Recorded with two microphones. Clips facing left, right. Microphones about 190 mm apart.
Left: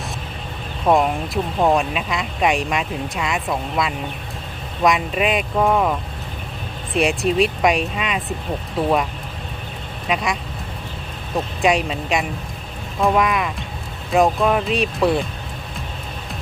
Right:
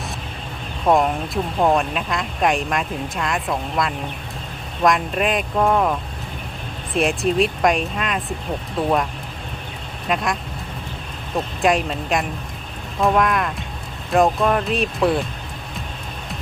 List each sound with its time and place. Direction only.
0.9 s speech: centre (ahead or behind)
10.1 s speech: centre (ahead or behind)
11.6 s speech: centre (ahead or behind)